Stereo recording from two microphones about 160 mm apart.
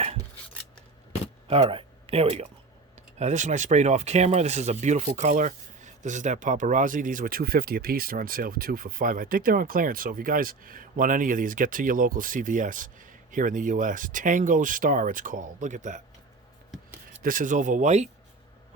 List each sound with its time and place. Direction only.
1.5 s speech: 35° right (ahead or behind)
16.7 s filing: centre (ahead or behind)
17.2 s speech: 55° right (ahead or behind)